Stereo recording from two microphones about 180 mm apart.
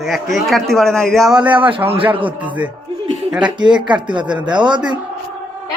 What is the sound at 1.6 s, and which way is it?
Speech, 30° right (ahead or behind).